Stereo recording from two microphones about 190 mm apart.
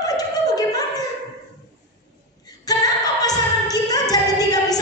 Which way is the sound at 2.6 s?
20° left (ahead or behind).